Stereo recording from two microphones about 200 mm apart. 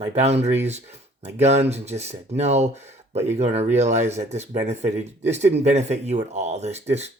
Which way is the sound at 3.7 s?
35° right (ahead or behind).